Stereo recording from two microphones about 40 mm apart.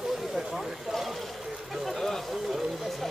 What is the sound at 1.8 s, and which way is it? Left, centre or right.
Speech, centre.